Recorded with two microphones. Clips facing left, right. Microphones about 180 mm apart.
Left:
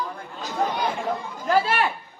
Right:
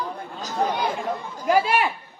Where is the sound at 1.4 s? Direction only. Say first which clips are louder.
Right 2 dB; 15° right (ahead or behind).